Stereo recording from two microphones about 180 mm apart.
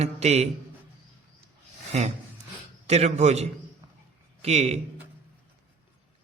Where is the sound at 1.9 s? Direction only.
40° right (ahead or behind).